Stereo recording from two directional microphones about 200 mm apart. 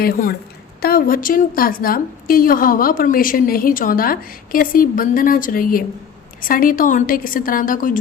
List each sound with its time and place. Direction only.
0.0 s a woman's voice: 50° left (ahead or behind)